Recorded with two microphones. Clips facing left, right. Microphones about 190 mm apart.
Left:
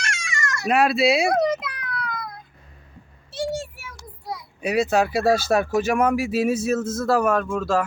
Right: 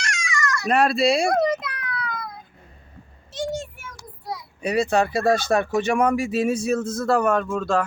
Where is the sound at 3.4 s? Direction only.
5° left (ahead or behind).